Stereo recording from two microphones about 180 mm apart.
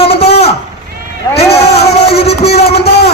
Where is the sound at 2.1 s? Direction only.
35° left (ahead or behind).